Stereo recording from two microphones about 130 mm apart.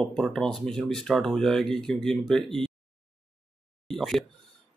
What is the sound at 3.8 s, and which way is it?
Speech, centre (ahead or behind).